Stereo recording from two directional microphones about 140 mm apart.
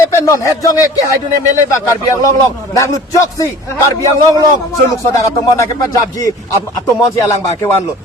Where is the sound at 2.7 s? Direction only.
25° left (ahead or behind).